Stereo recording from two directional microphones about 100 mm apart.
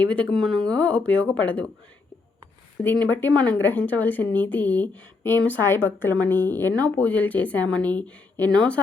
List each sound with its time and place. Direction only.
0.0 s a woman's voice: 15° left (ahead or behind)
2.8 s a woman's voice: 15° left (ahead or behind)